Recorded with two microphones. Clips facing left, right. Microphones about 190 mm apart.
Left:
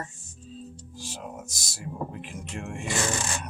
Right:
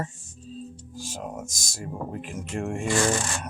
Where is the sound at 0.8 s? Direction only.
45° right (ahead or behind).